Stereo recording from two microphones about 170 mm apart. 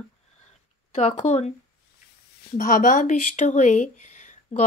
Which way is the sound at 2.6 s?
55° left (ahead or behind).